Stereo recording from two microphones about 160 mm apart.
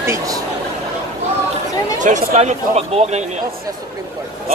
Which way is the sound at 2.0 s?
50° right (ahead or behind).